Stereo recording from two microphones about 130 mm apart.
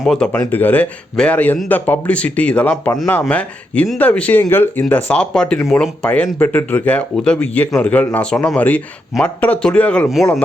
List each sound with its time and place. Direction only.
0.0 s speech: 5° left (ahead or behind)
10.1 s speech: centre (ahead or behind)